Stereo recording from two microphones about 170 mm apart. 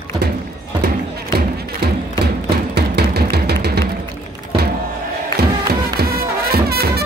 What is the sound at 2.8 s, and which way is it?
Music, 70° right (ahead or behind).